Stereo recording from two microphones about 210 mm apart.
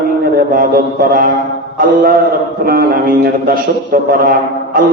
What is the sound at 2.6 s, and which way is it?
A man's voice, 45° right (ahead or behind).